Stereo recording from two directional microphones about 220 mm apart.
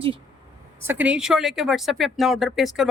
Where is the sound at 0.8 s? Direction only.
10° right (ahead or behind).